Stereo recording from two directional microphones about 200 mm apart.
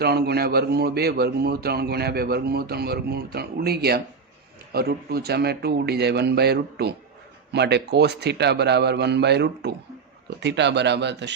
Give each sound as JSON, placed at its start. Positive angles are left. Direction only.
{"t": 0.0, "sound": "a man's voice", "side_deg": -55}